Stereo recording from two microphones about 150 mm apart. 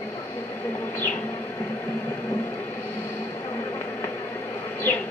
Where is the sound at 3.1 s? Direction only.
15° left (ahead or behind).